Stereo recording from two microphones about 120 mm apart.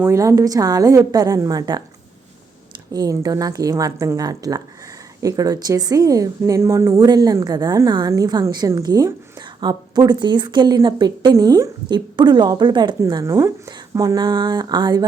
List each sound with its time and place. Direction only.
0.0 s a woman's voice: 25° right (ahead or behind)
2.9 s a woman's voice: 30° right (ahead or behind)
13.3 s a woman's voice: 25° right (ahead or behind)